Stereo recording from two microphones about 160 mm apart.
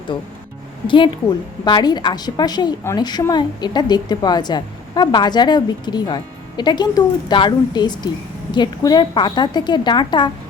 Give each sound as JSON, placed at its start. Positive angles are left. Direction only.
{"t": 0.9, "sound": "a woman's voice", "side_deg": 30}